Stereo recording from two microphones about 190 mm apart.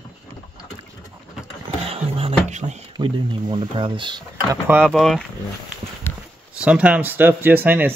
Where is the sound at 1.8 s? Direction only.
30° right (ahead or behind).